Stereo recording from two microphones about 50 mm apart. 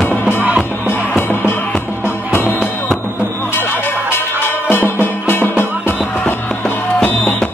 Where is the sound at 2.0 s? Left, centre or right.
Left.